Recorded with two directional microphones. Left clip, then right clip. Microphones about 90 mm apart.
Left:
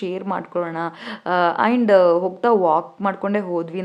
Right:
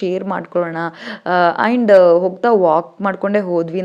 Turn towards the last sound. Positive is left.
turn(degrees=-30)  # may be behind; listen again after turning